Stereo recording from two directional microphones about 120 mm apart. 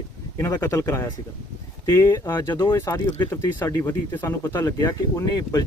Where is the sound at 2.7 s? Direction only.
25° left (ahead or behind).